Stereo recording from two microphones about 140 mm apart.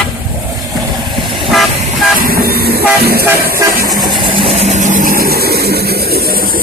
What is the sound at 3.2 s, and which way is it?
Vehicle, 15° right (ahead or behind).